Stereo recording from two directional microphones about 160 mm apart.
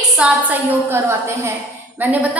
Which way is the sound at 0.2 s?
10° right (ahead or behind).